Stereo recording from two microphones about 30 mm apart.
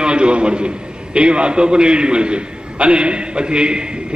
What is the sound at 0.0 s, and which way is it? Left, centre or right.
A man's voice, right.